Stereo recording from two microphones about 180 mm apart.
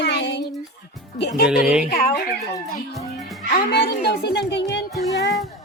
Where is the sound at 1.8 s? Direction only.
60° left (ahead or behind).